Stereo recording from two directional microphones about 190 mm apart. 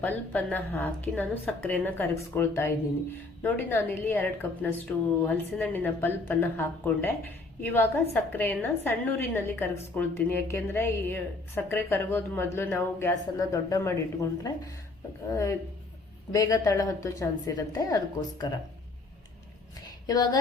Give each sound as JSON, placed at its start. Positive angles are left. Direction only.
{"t": 0.0, "sound": "a woman's voice", "side_deg": 10}
{"t": 20.1, "sound": "a woman's voice", "side_deg": 20}